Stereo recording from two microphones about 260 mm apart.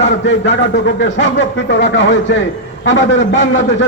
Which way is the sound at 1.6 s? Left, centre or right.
Left.